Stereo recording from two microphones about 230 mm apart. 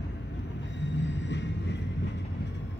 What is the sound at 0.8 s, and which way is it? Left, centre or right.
Vehicle, left.